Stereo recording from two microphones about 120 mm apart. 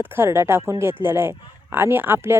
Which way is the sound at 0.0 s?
20° right (ahead or behind).